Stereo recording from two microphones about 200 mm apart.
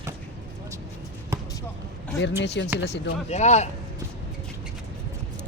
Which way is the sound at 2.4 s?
60° left (ahead or behind).